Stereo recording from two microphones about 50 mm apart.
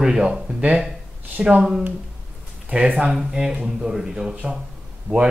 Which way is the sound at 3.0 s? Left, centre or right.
Centre.